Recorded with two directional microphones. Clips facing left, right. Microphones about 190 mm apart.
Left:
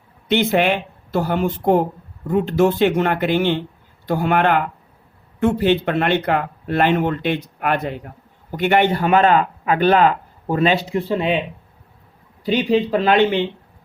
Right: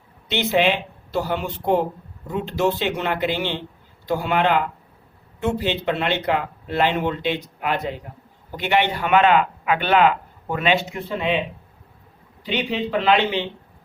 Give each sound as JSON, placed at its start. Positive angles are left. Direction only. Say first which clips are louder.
{"t": 0.3, "sound": "speech", "louder": "left 3 dB", "side_deg": 50}
{"t": 12.5, "sound": "speech", "louder": "left 7 dB", "side_deg": 40}